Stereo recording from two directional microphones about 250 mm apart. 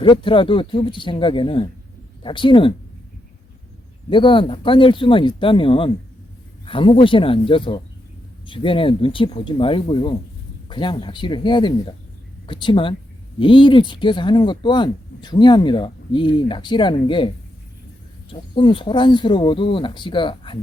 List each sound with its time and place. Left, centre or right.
0.0 s speech: centre
4.1 s speech: centre